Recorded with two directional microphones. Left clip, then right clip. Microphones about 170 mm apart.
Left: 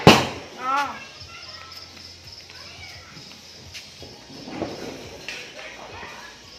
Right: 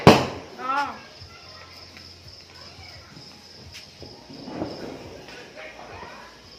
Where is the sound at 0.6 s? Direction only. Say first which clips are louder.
Left 2 dB; 55° left (ahead or behind).